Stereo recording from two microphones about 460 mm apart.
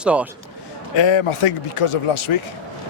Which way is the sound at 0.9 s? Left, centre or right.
Left.